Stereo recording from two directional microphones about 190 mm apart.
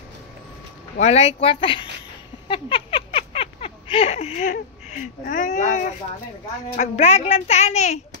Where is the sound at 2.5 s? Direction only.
25° left (ahead or behind).